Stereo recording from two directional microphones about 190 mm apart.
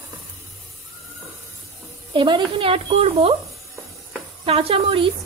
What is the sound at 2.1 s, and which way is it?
A woman's voice, 25° right (ahead or behind).